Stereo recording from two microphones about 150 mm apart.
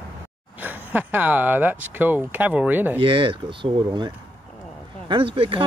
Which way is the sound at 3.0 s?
35° right (ahead or behind).